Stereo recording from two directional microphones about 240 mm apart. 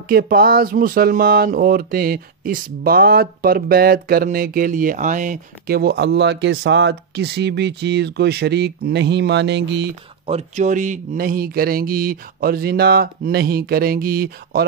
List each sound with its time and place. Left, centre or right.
0.1 s speech: right
10.2 s speech: right